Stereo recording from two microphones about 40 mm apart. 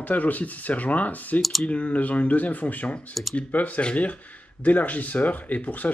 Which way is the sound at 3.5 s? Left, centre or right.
Left.